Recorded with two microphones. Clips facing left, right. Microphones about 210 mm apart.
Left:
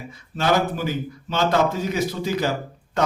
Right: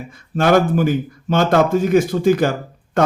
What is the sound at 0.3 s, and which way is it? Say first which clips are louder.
A man's voice: right 7 dB; 50° right (ahead or behind).